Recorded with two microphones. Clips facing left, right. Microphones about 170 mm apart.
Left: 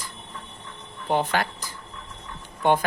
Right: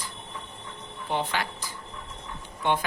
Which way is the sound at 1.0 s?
50° left (ahead or behind).